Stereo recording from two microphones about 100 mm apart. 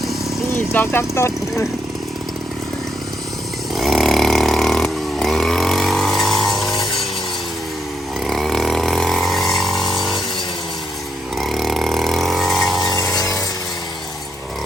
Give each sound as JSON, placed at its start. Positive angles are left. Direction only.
{"t": 0.5, "sound": "speech", "side_deg": 20}
{"t": 3.8, "sound": "a sound", "side_deg": 0}
{"t": 8.3, "sound": "chainsaw", "side_deg": 0}
{"t": 11.3, "sound": "vehicle", "side_deg": 0}